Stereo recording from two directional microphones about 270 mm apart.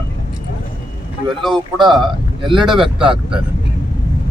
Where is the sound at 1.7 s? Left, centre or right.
Centre.